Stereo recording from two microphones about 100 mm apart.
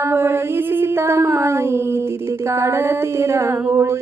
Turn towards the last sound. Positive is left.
turn(degrees=-30)  # may be behind; listen again after turning